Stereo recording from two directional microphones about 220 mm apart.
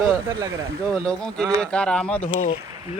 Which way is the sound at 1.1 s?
5° left (ahead or behind).